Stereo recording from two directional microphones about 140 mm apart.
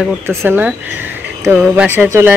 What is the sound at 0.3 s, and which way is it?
A man's voice, 15° right (ahead or behind).